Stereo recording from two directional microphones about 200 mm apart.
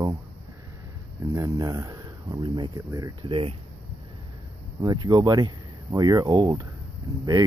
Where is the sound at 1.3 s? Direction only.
15° right (ahead or behind).